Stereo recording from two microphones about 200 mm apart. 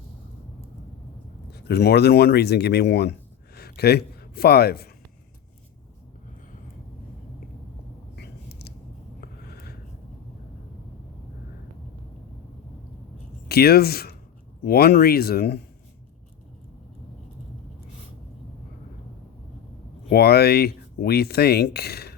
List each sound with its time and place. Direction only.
1.5 s speech: 55° left (ahead or behind)
8.1 s a sound: 55° left (ahead or behind)
13.5 s speech: 50° left (ahead or behind)
20.1 s speech: 50° left (ahead or behind)